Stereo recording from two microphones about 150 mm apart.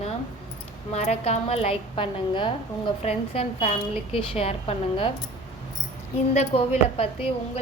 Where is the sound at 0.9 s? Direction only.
45° left (ahead or behind).